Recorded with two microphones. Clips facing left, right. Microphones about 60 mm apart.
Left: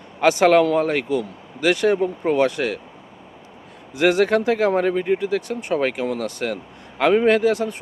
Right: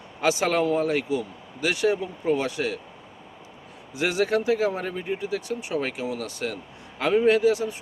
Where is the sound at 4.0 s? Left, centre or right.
Left.